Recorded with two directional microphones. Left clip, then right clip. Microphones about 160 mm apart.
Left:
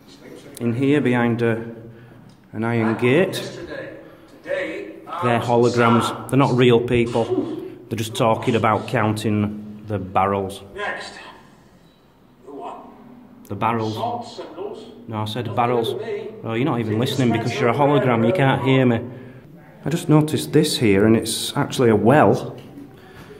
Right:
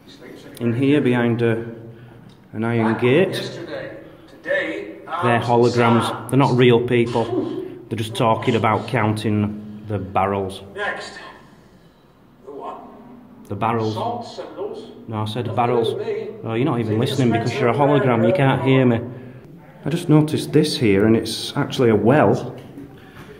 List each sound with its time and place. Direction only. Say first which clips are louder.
0.6 s speech: right 1 dB; 5° left (ahead or behind)
5.2 s a man's voice: right 1 dB; 5° left (ahead or behind)
13.5 s a man's voice: right 1 dB; centre (ahead or behind)
15.0 s a man's voice: right 1 dB; 5° left (ahead or behind)